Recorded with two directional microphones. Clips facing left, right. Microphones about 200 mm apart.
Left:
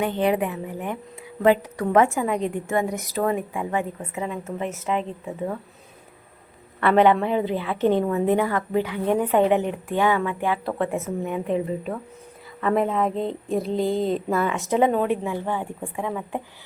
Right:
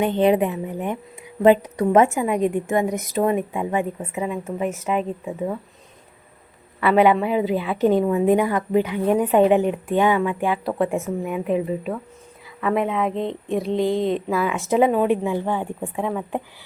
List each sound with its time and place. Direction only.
0.0 s a woman's voice: 20° right (ahead or behind)
6.7 s a woman's voice: 5° right (ahead or behind)
12.5 s a woman's voice: 5° right (ahead or behind)